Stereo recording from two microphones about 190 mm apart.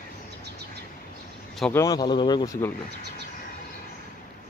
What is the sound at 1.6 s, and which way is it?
Speech, 10° left (ahead or behind).